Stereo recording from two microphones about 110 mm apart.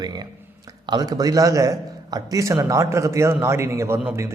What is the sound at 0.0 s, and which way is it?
A man's voice, 40° right (ahead or behind).